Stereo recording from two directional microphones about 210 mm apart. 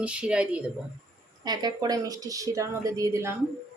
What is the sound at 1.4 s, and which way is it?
Speech, 20° right (ahead or behind).